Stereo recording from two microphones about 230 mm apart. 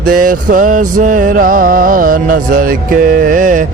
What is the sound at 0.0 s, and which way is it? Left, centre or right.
Mantra, right.